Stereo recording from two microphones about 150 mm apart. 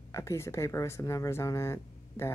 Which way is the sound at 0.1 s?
20° left (ahead or behind).